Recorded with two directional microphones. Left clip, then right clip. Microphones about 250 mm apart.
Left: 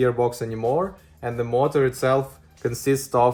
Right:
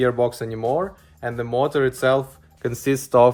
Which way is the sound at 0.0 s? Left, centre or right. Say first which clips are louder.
Right 1 dB; centre.